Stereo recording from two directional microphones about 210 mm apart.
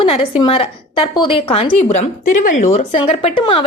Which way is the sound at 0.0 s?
25° left (ahead or behind).